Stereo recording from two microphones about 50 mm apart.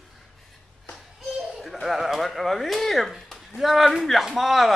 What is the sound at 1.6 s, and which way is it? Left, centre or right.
A man's voice, centre.